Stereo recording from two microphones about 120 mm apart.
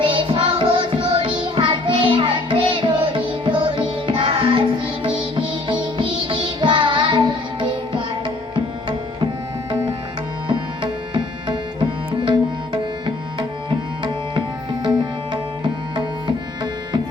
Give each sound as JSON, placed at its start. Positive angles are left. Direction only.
{"t": 0.0, "sound": "music", "side_deg": -45}
{"t": 10.5, "sound": "tabla", "side_deg": -45}